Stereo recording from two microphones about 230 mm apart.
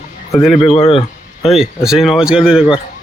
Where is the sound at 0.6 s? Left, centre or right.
Left.